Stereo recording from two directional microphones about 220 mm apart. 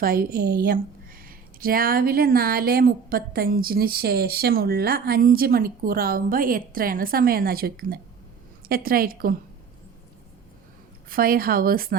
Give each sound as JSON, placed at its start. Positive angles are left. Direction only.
{"t": 0.0, "sound": "speech", "side_deg": -40}
{"t": 11.1, "sound": "speech", "side_deg": -40}